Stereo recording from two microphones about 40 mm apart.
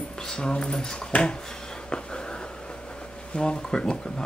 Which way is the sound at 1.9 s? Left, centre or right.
Left.